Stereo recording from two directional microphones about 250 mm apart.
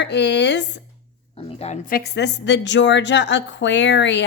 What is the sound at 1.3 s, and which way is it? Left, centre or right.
Speech, left.